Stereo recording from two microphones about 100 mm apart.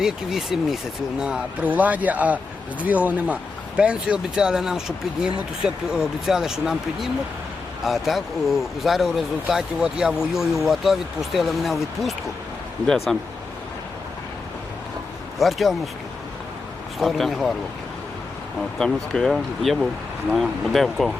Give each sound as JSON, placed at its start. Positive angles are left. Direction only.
{"t": 0.0, "sound": "speech", "side_deg": -5}
{"t": 15.4, "sound": "speech", "side_deg": 0}
{"t": 17.0, "sound": "speech", "side_deg": 0}
{"t": 18.8, "sound": "speech", "side_deg": 5}